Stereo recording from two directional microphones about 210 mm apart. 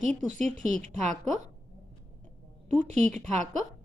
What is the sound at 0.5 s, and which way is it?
Speech, 40° right (ahead or behind).